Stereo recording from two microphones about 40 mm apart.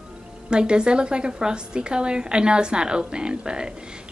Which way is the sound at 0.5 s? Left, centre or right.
Right.